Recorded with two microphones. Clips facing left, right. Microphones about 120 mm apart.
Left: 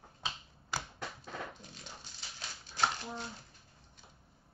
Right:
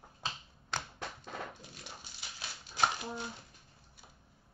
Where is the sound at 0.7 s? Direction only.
5° left (ahead or behind).